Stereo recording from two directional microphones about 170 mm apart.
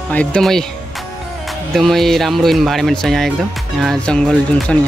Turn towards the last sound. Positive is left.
turn(degrees=5)  # may be behind; listen again after turning